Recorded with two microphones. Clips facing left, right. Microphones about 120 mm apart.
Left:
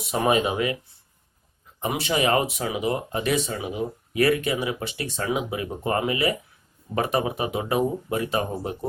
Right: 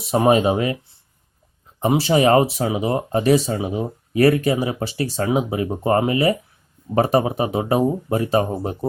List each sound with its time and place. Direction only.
0.0 s speech: 35° right (ahead or behind)
1.8 s speech: 35° right (ahead or behind)